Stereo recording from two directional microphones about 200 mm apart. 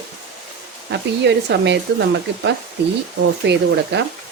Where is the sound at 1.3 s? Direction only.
60° right (ahead or behind).